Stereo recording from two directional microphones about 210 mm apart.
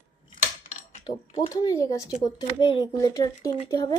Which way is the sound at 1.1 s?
20° left (ahead or behind).